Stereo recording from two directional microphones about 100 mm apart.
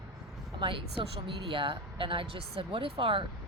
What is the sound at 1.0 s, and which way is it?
A woman's voice, 60° right (ahead or behind).